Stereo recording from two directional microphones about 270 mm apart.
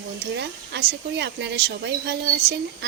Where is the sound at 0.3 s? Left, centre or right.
Right.